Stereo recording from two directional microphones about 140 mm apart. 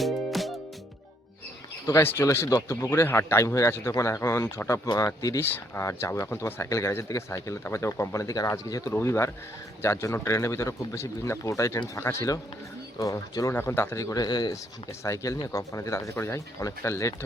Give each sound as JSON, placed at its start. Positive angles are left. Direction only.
{"t": 0.0, "sound": "music", "side_deg": 0}
{"t": 1.9, "sound": "speech", "side_deg": 20}